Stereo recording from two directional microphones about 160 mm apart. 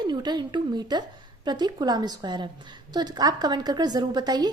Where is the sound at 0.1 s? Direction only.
25° right (ahead or behind).